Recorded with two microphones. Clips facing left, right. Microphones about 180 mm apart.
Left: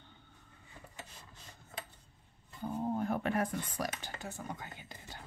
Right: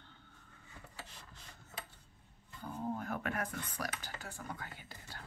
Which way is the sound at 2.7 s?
30° left (ahead or behind).